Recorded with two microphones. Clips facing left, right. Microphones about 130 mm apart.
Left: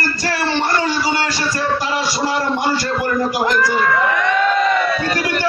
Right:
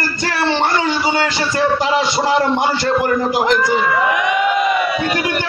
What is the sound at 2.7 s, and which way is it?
A man's voice, 20° right (ahead or behind).